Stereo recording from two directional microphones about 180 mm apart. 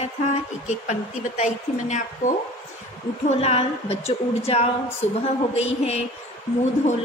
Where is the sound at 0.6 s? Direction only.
45° left (ahead or behind).